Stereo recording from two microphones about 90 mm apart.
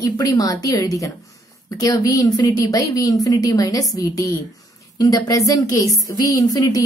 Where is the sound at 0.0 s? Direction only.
40° left (ahead or behind).